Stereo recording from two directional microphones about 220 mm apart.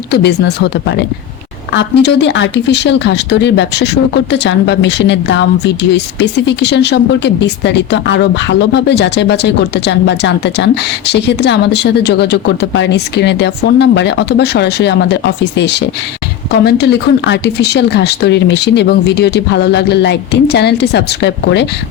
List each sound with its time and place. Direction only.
0.1 s speech: 50° left (ahead or behind)